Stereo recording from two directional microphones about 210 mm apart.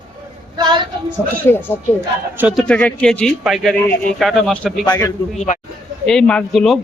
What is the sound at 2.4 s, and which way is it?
Speech, 5° right (ahead or behind).